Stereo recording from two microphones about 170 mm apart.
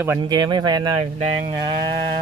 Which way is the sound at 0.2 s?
25° right (ahead or behind).